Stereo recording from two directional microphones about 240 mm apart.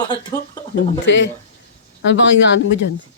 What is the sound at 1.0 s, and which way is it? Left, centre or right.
Speech, left.